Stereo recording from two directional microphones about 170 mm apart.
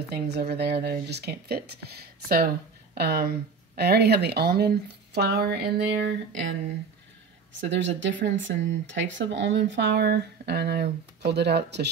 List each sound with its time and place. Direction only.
0.1 s speech: 70° right (ahead or behind); by 6.1 s 90° right
7.7 s speech: 90° right